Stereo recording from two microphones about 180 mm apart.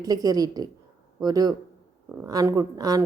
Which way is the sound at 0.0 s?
20° right (ahead or behind).